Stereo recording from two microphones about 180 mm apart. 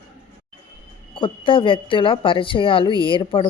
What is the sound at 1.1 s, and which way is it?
Speech, 30° left (ahead or behind).